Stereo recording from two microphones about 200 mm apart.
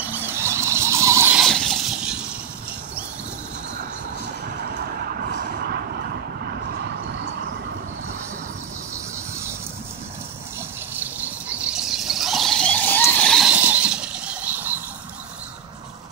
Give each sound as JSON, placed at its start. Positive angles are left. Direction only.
{"t": 0.0, "sound": "vehicle", "side_deg": -10}
{"t": 1.4, "sound": "a sound", "side_deg": 0}
{"t": 5.3, "sound": "vehicle", "side_deg": -45}
{"t": 11.0, "sound": "squeal", "side_deg": -10}